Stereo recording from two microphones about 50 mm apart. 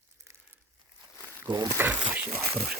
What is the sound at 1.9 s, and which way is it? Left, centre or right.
Speech, right.